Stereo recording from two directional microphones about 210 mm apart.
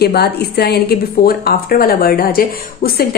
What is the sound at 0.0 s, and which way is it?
A woman's voice, 50° left (ahead or behind).